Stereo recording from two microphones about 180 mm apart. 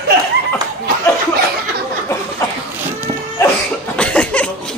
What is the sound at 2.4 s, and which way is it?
Cough, 20° left (ahead or behind).